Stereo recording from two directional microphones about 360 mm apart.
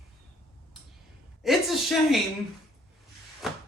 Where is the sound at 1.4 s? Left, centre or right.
Centre.